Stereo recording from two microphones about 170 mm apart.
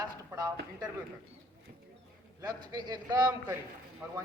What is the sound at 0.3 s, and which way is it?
Speech, 20° right (ahead or behind).